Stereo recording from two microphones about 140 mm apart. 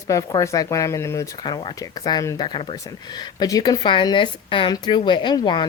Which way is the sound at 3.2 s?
25° left (ahead or behind).